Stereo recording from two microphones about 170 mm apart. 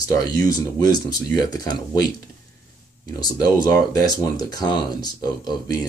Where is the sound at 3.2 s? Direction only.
20° left (ahead or behind).